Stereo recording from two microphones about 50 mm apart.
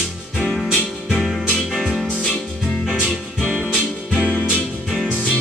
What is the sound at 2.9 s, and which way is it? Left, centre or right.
Music, left.